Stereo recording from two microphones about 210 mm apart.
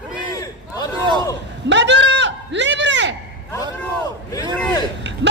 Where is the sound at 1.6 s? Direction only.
60° right (ahead or behind).